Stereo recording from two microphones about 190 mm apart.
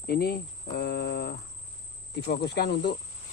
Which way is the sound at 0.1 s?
55° left (ahead or behind).